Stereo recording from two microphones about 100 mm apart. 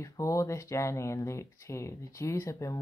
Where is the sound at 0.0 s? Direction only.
30° left (ahead or behind).